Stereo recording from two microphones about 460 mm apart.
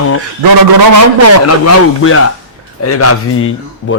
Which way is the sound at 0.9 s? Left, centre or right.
Right.